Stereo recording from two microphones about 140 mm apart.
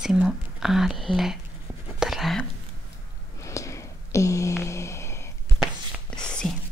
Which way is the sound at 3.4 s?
20° left (ahead or behind).